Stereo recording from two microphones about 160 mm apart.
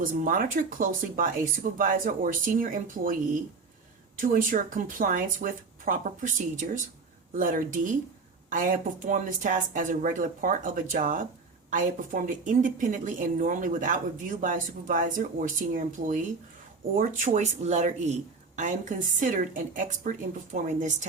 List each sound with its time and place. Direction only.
0.0 s a woman's voice: 60° right (ahead or behind)
4.2 s a woman's voice: 60° right (ahead or behind)